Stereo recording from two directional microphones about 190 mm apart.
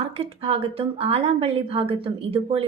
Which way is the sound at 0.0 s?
30° right (ahead or behind).